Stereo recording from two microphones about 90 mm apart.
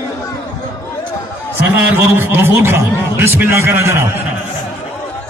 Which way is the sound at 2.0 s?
25° right (ahead or behind).